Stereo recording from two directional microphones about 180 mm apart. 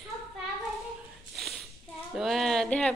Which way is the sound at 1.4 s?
Centre (ahead or behind).